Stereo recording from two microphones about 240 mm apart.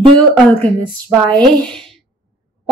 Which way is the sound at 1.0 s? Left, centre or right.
Centre.